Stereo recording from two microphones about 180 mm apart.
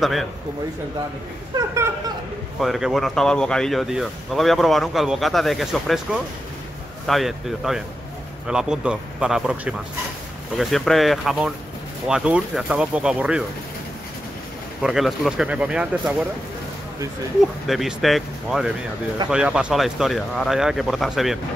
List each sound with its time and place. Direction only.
0.0 s speech: centre (ahead or behind)
1.5 s a sound: 20° right (ahead or behind)
2.6 s speech: centre (ahead or behind)
14.8 s speech: centre (ahead or behind)
17.6 s speech: centre (ahead or behind)